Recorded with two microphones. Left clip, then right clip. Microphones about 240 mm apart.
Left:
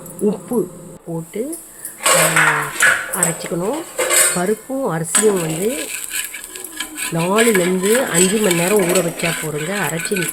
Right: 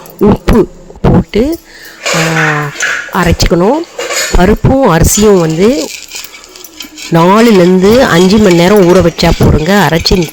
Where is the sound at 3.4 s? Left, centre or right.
Right.